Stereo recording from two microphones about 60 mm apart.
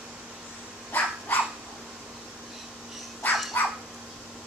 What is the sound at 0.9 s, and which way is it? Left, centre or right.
Cat, left.